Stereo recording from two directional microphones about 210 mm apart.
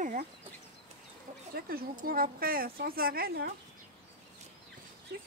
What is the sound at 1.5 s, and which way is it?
Speech, 45° right (ahead or behind).